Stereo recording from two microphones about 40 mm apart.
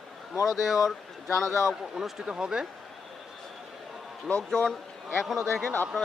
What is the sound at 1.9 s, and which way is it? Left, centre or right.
Speech, centre.